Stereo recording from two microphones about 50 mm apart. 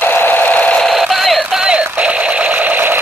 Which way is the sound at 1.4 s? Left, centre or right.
Centre.